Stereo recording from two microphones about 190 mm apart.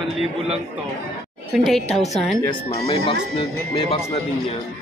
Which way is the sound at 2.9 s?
30° left (ahead or behind).